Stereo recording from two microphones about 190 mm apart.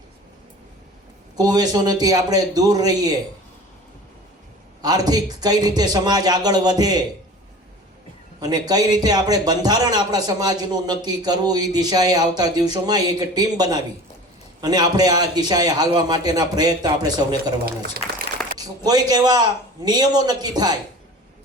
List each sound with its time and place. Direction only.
1.4 s a man's voice: 20° right (ahead or behind)
4.8 s a man's voice: 20° right (ahead or behind)
8.4 s a man's voice: 20° right (ahead or behind)
18.5 s a man's voice: 20° right (ahead or behind)